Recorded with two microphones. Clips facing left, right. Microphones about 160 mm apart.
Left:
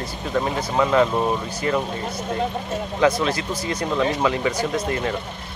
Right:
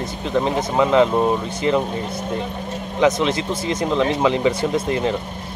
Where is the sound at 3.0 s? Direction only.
20° right (ahead or behind).